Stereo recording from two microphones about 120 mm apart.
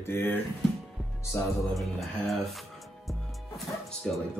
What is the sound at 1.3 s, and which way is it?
Music, 20° left (ahead or behind).